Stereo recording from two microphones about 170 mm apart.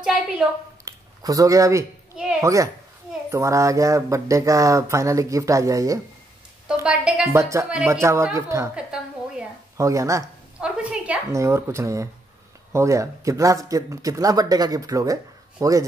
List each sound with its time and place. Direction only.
0.0 s a woman's voice: 5° right (ahead or behind)
0.8 s speech: 20° right (ahead or behind)
6.7 s a woman's voice: 5° right (ahead or behind)
7.3 s speech: 15° right (ahead or behind)
8.7 s a sound: 5° right (ahead or behind)
9.8 s speech: 20° right (ahead or behind)
10.6 s a woman's voice: 5° right (ahead or behind)
11.3 s speech: 15° right (ahead or behind)